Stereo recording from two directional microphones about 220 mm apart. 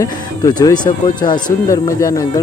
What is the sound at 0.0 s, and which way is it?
Speech, 15° left (ahead or behind).